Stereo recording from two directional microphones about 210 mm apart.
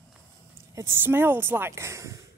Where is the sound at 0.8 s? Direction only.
10° right (ahead or behind).